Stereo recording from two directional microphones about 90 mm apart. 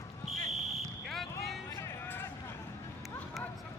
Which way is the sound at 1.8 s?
25° left (ahead or behind).